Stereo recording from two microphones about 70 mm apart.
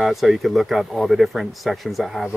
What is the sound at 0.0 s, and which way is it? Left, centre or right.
Speech, centre.